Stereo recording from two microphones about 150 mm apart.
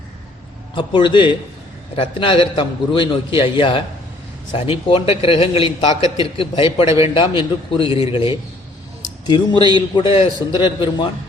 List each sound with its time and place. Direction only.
0.8 s a man's voice: 35° left (ahead or behind)